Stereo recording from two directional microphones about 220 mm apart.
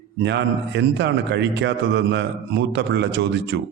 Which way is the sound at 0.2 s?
50° right (ahead or behind).